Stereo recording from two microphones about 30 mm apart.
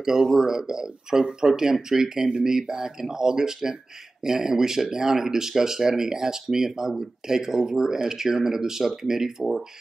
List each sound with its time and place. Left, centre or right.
0.0 s speech: centre